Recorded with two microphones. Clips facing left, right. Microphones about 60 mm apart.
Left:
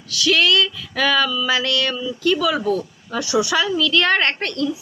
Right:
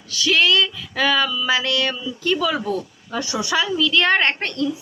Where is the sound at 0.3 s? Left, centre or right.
Right.